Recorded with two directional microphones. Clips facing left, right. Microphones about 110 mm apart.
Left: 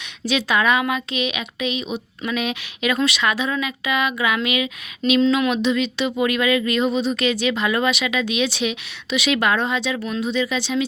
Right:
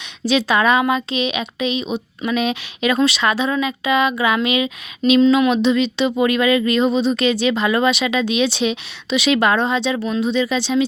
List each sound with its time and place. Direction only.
0.3 s a woman's voice: 30° right (ahead or behind)